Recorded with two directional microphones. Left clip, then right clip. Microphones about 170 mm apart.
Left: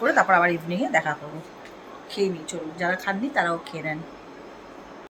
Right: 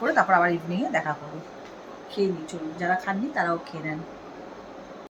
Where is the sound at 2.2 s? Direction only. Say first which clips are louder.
Left 1 dB; 5° left (ahead or behind).